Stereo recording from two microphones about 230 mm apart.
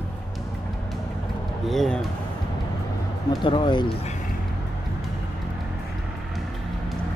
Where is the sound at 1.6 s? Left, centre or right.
Centre.